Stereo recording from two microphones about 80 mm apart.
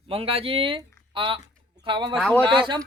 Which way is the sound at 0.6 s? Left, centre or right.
Right.